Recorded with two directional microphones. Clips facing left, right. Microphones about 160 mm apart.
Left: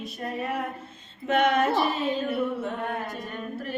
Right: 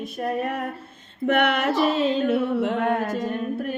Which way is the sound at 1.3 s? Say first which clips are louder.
Right 1 dB; 65° right (ahead or behind).